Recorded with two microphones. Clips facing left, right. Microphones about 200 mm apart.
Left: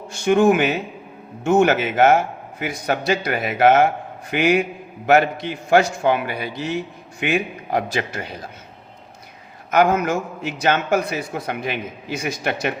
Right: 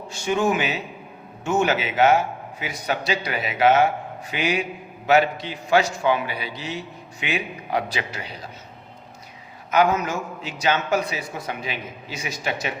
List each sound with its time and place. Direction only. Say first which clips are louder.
0.1 s a man's voice: left 7 dB; 55° left (ahead or behind)
9.7 s a man's voice: left 3 dB; 50° left (ahead or behind)